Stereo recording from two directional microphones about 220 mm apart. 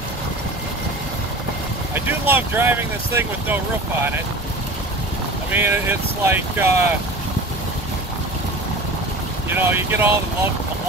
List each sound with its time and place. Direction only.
2.0 s speech: 10° right (ahead or behind)
5.5 s speech: 10° right (ahead or behind)
9.5 s speech: 10° right (ahead or behind)